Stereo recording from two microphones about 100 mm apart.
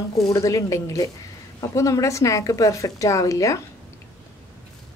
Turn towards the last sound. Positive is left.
turn(degrees=30)  # may be behind; listen again after turning